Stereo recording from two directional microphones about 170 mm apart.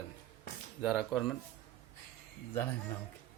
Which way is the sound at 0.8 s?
Centre (ahead or behind).